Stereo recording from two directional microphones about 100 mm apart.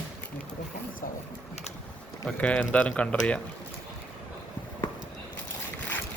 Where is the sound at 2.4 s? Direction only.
10° left (ahead or behind).